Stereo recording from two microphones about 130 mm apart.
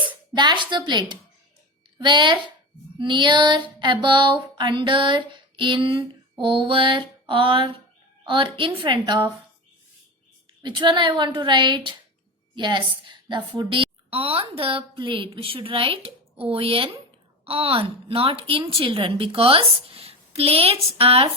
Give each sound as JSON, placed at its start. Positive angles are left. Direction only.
{"t": 0.3, "sound": "female singing", "side_deg": -35}
{"t": 10.6, "sound": "female singing", "side_deg": -35}
{"t": 12.5, "sound": "a woman's voice", "side_deg": -35}